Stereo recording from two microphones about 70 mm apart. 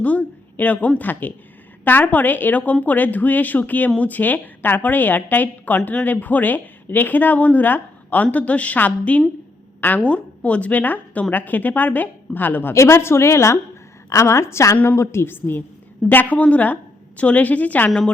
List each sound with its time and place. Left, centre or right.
0.0 s a man's voice: left
12.7 s a woman's voice: left